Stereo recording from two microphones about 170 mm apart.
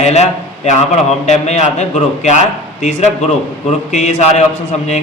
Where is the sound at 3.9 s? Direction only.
45° left (ahead or behind).